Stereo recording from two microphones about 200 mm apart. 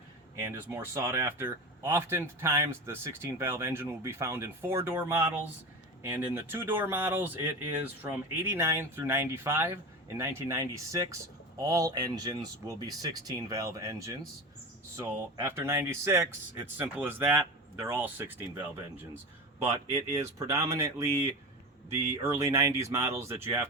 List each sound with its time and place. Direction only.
0.3 s speech: 15° right (ahead or behind)
19.9 s speech: 15° right (ahead or behind)